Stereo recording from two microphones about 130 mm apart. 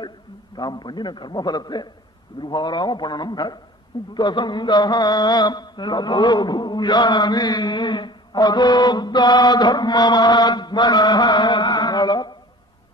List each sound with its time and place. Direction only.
0.6 s mantra: 35° left (ahead or behind)